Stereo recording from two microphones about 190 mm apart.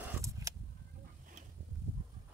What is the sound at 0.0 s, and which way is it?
Vehicle, 15° right (ahead or behind).